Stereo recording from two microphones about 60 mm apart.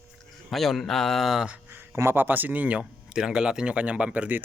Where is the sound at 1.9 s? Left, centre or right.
Right.